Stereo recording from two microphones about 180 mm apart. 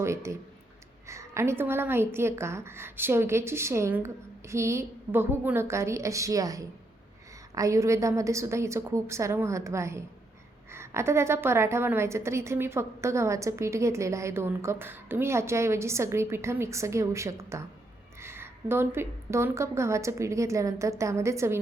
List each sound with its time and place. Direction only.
0.0 s a woman's voice: 15° right (ahead or behind)